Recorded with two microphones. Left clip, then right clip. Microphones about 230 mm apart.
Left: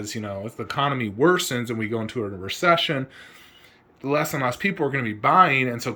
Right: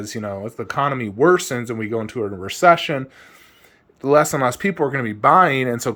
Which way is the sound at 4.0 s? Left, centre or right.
Right.